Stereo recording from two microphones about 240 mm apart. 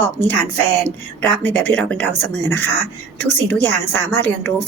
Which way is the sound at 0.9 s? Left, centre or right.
Centre.